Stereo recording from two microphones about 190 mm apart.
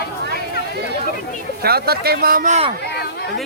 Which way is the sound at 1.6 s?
55° right (ahead or behind).